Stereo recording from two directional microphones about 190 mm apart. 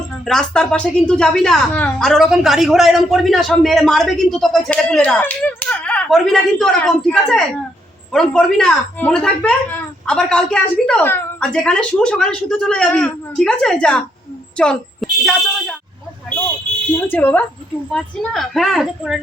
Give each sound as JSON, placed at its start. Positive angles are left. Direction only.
{"t": 0.3, "sound": "a woman's voice", "side_deg": 5}
{"t": 17.1, "sound": "a woman's voice", "side_deg": 10}